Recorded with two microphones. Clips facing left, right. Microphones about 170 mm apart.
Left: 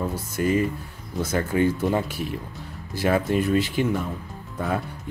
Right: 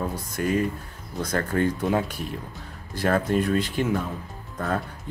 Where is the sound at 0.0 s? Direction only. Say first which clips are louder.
Left 2 dB; centre (ahead or behind).